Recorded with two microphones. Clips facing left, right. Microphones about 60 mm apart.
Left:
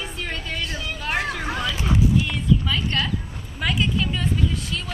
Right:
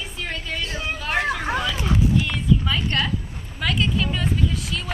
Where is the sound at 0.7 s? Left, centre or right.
Right.